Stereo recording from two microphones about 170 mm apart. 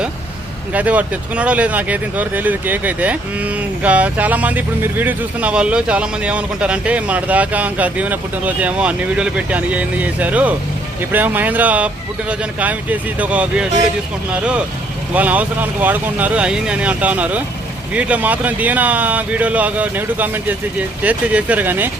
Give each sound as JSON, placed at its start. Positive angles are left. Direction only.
{"t": 0.7, "sound": "speech", "side_deg": -10}